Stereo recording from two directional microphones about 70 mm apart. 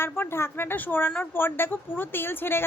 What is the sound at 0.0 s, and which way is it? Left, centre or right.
A woman's voice, left.